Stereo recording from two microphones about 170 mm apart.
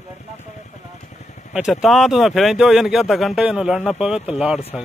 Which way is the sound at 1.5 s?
5° right (ahead or behind).